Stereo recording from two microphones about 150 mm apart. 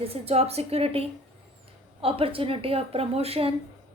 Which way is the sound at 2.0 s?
40° right (ahead or behind).